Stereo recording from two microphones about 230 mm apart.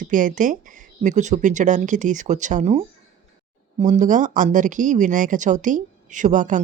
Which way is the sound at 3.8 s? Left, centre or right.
Right.